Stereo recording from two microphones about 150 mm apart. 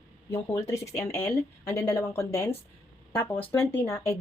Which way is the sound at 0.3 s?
15° left (ahead or behind).